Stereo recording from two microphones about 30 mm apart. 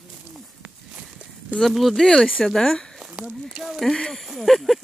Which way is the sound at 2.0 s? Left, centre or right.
Centre.